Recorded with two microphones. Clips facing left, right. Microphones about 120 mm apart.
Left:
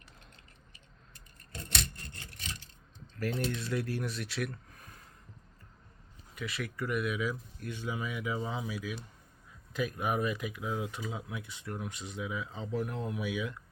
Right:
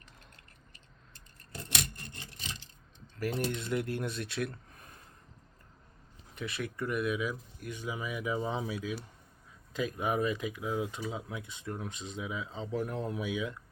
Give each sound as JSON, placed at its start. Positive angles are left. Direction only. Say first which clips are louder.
{"t": 2.2, "sound": "rub", "louder": "left 1 dB", "side_deg": -20}
{"t": 3.3, "sound": "speech", "louder": "right 2 dB", "side_deg": -20}
{"t": 6.4, "sound": "speech", "louder": "right 1 dB", "side_deg": -25}